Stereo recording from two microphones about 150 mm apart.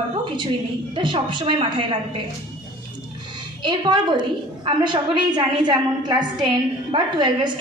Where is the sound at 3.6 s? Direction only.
30° right (ahead or behind).